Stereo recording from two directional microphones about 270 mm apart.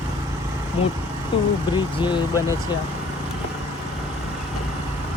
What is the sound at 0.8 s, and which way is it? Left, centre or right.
Speech, left.